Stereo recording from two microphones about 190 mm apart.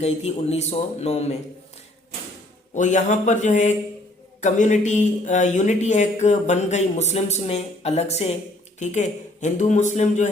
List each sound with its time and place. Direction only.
0.0 s speech: 35° left (ahead or behind)
2.7 s speech: 40° left (ahead or behind)